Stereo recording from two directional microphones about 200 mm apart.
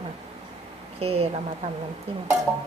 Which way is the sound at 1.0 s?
30° right (ahead or behind).